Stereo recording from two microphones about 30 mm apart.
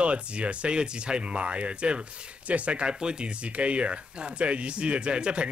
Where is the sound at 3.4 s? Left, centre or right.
Right.